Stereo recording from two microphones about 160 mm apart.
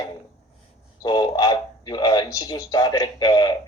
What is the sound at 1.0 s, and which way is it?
A man's voice, 25° left (ahead or behind).